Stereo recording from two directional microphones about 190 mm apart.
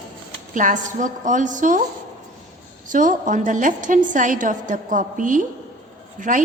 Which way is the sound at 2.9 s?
45° right (ahead or behind).